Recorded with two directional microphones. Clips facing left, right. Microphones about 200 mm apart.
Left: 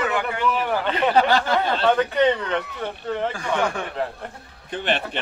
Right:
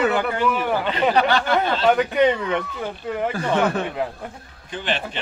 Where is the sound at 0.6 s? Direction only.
10° right (ahead or behind).